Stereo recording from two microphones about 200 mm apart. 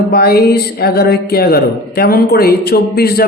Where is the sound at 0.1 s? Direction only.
50° left (ahead or behind).